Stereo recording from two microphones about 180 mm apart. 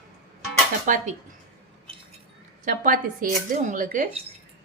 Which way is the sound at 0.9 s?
45° right (ahead or behind).